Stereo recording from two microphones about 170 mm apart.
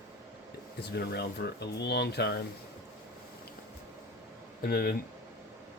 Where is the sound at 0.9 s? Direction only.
75° left (ahead or behind).